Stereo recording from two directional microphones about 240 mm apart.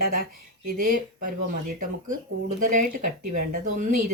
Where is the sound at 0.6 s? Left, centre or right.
Right.